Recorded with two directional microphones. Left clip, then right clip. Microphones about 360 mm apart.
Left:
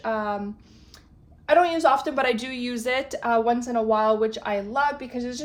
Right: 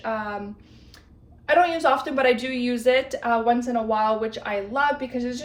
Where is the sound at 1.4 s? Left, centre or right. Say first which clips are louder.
Even; centre.